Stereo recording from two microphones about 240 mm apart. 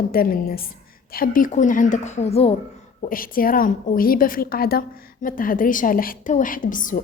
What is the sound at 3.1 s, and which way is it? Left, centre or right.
A woman's voice, left.